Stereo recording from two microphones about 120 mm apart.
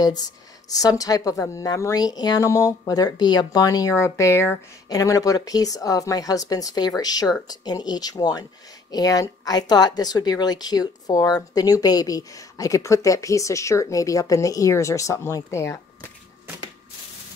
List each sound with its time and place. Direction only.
0.7 s a woman's voice: 30° left (ahead or behind)